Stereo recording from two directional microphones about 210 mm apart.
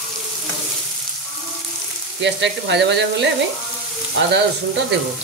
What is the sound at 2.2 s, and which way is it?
Frying, 55° right (ahead or behind).